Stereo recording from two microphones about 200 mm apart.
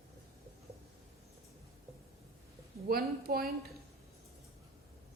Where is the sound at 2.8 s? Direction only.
50° right (ahead or behind).